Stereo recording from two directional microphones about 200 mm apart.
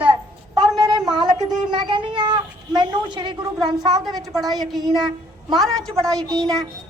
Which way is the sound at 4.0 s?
Centre (ahead or behind).